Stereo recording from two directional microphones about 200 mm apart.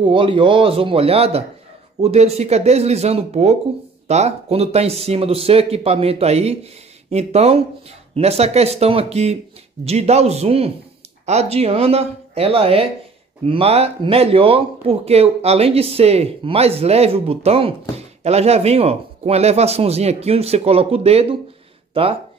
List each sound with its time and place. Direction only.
0.0 s speech: 25° right (ahead or behind)